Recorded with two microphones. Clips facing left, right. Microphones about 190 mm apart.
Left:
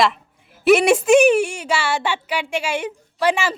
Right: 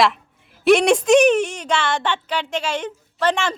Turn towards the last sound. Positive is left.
turn(degrees=10)  # may be behind; listen again after turning